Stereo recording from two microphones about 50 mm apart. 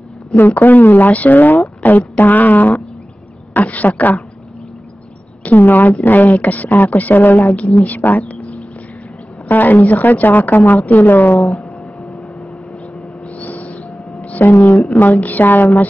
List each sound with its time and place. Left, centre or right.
0.3 s a woman's voice: left
5.4 s a woman's voice: left
7.5 s a woman's voice: left
9.5 s a woman's voice: left
13.4 s owl: left
14.2 s a sound: left
15.0 s a woman's voice: left